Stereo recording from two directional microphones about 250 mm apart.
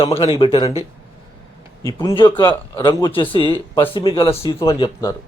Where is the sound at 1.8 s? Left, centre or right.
Centre.